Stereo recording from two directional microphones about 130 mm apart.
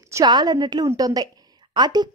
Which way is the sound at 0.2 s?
35° right (ahead or behind).